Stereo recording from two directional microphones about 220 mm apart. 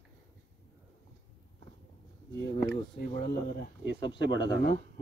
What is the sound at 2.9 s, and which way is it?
Speech, 45° left (ahead or behind).